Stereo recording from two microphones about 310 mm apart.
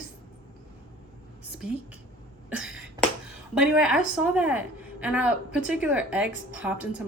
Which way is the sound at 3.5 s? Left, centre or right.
Centre.